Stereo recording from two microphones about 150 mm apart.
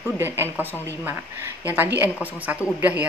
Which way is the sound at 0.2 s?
15° right (ahead or behind).